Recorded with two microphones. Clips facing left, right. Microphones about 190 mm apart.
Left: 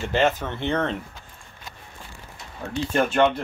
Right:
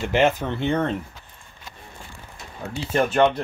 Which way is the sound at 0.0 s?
15° right (ahead or behind).